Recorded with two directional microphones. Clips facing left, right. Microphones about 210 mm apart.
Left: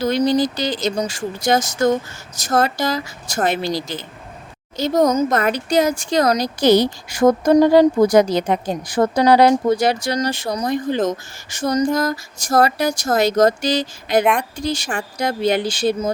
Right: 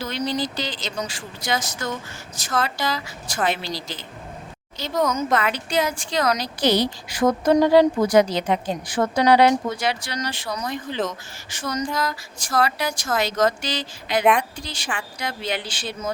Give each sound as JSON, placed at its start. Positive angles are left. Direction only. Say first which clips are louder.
{"t": 0.0, "sound": "speech", "louder": "left 9 dB", "side_deg": 40}
{"t": 4.8, "sound": "speech", "louder": "left 7 dB", "side_deg": 40}